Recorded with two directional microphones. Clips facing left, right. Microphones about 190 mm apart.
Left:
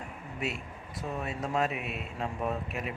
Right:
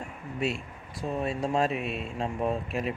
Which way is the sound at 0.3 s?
30° right (ahead or behind).